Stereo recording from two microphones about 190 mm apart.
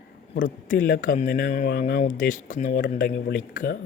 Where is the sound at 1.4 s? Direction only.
60° left (ahead or behind).